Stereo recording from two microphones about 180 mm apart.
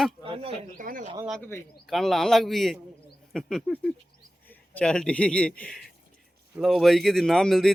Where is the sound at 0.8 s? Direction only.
50° right (ahead or behind).